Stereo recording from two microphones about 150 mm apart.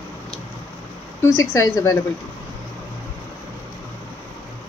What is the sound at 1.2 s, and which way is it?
Speech, 20° left (ahead or behind).